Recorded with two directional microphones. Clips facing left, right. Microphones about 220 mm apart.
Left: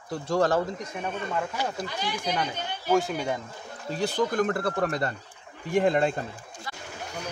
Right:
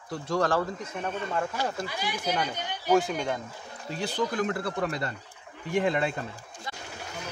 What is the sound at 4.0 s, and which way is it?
Speech, 45° left (ahead or behind).